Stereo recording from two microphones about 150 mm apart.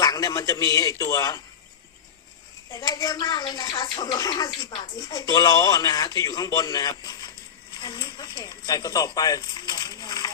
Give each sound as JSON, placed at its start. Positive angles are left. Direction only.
{"t": 0.0, "sound": "a man's voice", "side_deg": 25}
{"t": 2.7, "sound": "speech", "side_deg": 25}